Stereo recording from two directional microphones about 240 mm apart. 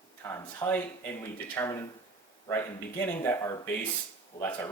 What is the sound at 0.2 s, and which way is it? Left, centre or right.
Speech, centre.